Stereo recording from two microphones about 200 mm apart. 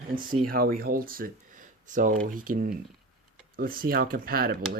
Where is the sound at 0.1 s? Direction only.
45° right (ahead or behind).